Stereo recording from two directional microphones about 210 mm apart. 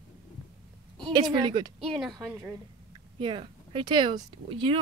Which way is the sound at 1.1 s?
20° right (ahead or behind).